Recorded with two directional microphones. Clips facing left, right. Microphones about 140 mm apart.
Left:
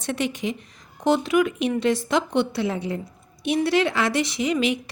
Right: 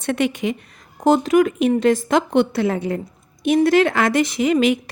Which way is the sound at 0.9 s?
45° right (ahead or behind).